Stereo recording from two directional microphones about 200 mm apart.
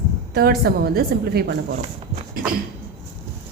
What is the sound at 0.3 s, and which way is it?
A woman's voice, 50° right (ahead or behind).